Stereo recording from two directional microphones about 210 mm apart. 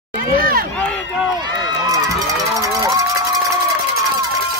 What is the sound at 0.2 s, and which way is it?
Crowd, 45° right (ahead or behind).